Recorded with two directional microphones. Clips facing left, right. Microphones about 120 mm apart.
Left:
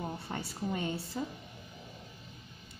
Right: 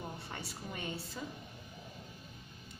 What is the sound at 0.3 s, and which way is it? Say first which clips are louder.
Speech: left 8 dB; 35° left (ahead or behind).